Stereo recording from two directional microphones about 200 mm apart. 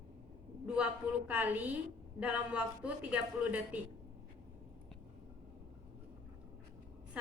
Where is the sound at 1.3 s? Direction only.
10° right (ahead or behind).